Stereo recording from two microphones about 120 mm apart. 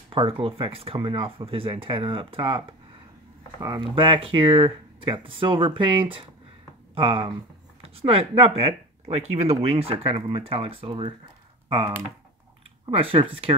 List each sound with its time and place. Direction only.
0.1 s speech: 45° right (ahead or behind)
3.6 s speech: 40° right (ahead or behind)
12.9 s speech: 50° right (ahead or behind)